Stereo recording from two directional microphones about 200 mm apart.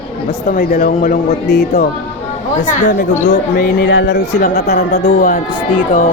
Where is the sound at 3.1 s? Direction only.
40° left (ahead or behind).